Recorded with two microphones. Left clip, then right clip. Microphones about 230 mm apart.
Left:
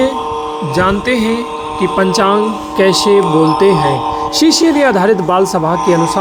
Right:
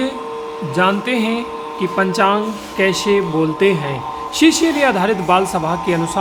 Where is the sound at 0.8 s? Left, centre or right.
Centre.